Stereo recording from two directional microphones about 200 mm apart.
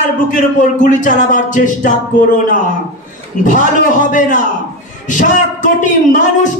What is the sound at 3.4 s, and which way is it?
Speech, 40° left (ahead or behind).